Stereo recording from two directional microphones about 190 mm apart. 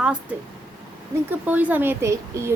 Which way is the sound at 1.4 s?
10° right (ahead or behind).